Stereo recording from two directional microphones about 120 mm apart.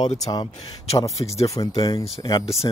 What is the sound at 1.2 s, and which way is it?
Speech, 35° left (ahead or behind).